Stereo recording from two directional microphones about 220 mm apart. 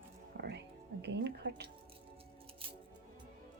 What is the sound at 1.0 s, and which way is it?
Speech, 50° right (ahead or behind).